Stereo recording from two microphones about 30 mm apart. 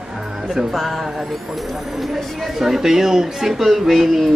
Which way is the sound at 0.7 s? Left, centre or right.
Centre.